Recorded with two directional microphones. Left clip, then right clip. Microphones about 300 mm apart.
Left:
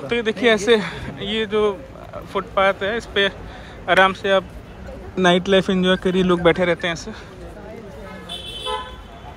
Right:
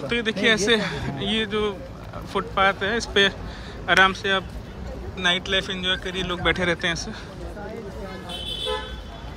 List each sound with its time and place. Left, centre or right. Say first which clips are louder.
0.1 s speech: left 4 dB; centre